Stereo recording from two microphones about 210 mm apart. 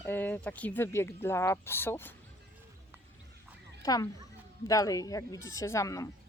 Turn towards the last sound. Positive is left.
turn(degrees=15)  # may be behind; listen again after turning